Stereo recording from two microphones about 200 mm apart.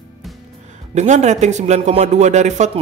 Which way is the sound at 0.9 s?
35° right (ahead or behind).